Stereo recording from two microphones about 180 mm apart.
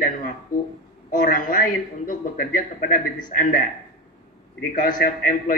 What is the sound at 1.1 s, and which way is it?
Speech, 45° left (ahead or behind).